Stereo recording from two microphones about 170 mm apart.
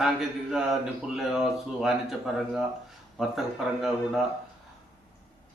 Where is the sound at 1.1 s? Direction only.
5° right (ahead or behind).